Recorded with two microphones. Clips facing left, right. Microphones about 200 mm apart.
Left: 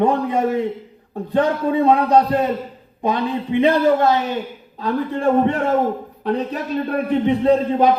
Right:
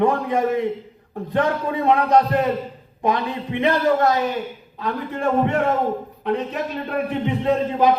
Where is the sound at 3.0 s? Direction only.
30° left (ahead or behind).